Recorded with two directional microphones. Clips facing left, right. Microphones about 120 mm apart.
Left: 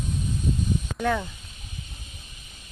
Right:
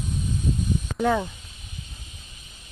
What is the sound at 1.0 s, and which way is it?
Speech, 20° right (ahead or behind).